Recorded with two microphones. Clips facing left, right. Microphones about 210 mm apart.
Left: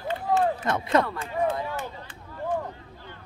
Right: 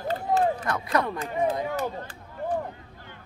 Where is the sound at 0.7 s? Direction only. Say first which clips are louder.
Left 3 dB; 25° left (ahead or behind).